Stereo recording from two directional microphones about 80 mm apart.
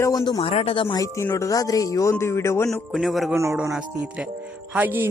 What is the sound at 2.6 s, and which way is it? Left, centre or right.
Speech, centre.